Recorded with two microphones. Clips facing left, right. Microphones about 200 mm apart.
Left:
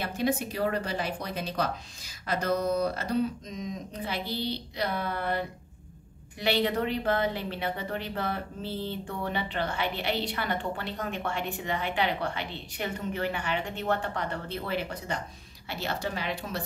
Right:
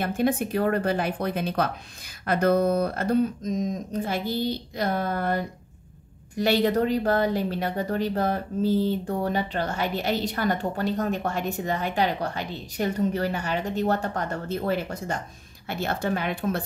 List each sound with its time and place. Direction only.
0.0 s a woman's voice: 50° right (ahead or behind)